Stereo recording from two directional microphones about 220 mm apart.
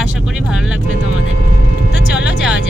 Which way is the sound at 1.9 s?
50° left (ahead or behind).